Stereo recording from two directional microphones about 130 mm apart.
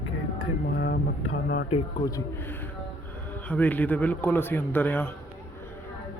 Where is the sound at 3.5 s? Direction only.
10° left (ahead or behind).